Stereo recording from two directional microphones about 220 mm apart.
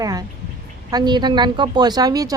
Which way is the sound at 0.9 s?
20° right (ahead or behind).